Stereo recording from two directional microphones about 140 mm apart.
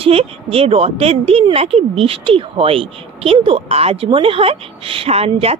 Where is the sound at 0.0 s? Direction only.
45° right (ahead or behind).